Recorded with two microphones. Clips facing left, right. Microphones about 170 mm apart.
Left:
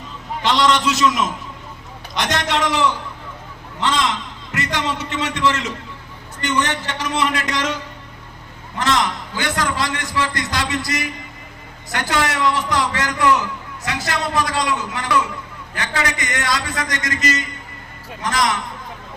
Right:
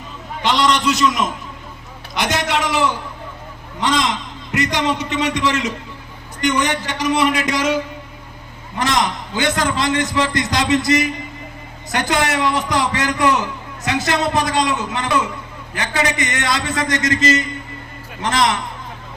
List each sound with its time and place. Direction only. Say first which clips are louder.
0.4 s a man's voice: even; centre (ahead or behind)
8.8 s a man's voice: right 1 dB; 15° right (ahead or behind)